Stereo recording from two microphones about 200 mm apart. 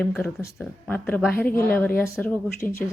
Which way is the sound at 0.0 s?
Centre (ahead or behind).